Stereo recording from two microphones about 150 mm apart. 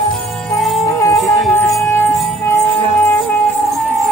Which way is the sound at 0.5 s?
Centre (ahead or behind).